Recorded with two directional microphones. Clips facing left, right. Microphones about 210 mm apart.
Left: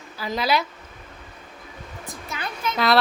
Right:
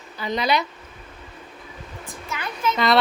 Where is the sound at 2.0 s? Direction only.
35° left (ahead or behind).